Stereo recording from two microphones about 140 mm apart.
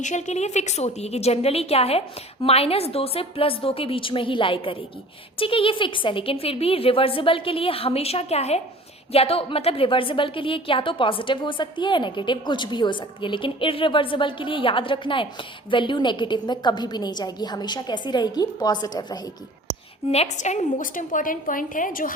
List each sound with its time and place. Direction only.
0.0 s a woman's voice: 60° left (ahead or behind); by 19.3 s 30° left (ahead or behind)
20.1 s a woman's voice: 50° left (ahead or behind); by 22.1 s 75° left (ahead or behind)